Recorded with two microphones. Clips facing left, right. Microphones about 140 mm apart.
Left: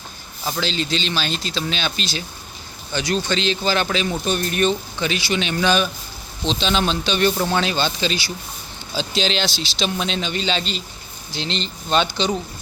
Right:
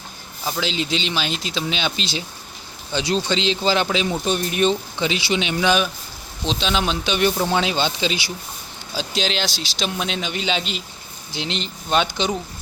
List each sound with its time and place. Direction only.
0.4 s speech: 10° right (ahead or behind)